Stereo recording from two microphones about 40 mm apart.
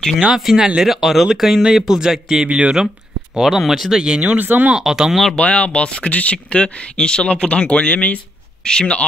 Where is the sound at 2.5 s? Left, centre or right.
Right.